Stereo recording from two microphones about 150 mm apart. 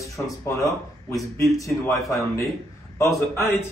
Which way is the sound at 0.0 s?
20° left (ahead or behind).